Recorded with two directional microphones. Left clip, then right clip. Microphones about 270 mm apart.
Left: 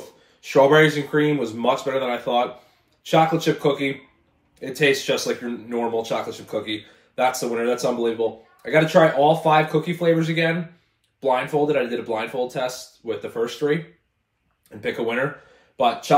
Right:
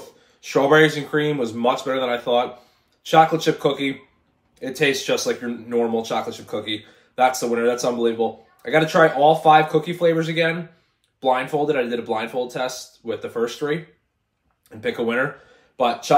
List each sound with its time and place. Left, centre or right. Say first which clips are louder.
0.4 s speech: left 1 dB; centre
14.8 s speech: right 2 dB; centre